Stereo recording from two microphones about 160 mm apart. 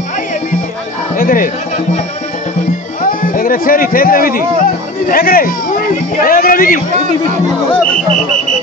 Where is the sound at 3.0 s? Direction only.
60° left (ahead or behind).